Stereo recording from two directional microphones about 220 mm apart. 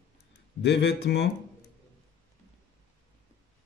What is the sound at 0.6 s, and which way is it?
Speech, 50° left (ahead or behind).